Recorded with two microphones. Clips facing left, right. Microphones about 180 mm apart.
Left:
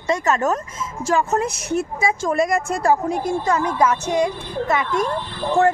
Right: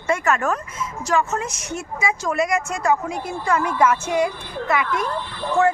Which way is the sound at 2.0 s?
30° left (ahead or behind).